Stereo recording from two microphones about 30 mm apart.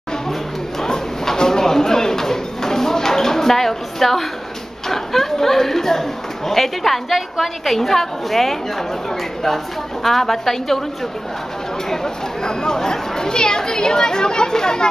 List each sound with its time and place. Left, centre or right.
0.3 s a sound: centre
4.8 s a woman's voice: centre
11.9 s speech: left